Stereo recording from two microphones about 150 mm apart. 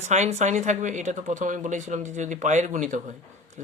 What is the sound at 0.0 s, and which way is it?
Speech, 50° right (ahead or behind).